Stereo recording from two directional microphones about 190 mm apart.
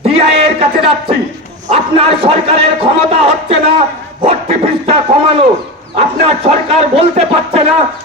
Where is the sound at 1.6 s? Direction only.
30° right (ahead or behind).